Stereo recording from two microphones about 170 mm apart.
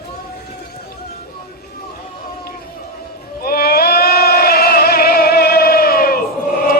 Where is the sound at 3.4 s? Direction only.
65° left (ahead or behind).